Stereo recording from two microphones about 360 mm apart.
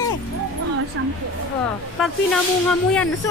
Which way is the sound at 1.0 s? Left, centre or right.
Right.